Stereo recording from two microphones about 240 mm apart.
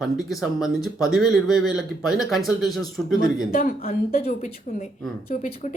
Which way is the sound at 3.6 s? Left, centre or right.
Left.